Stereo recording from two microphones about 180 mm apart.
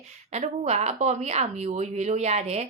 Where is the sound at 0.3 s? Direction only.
40° right (ahead or behind).